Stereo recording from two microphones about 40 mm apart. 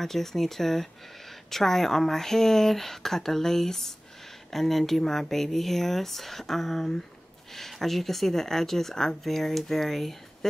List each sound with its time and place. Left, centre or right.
0.0 s speech: centre